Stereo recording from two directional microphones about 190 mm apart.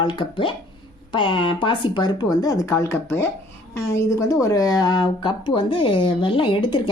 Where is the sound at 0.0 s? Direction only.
25° left (ahead or behind).